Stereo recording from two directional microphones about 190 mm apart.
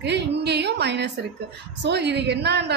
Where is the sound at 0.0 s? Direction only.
60° right (ahead or behind).